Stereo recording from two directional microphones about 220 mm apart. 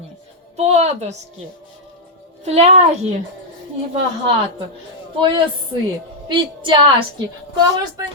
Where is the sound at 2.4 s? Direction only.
30° right (ahead or behind).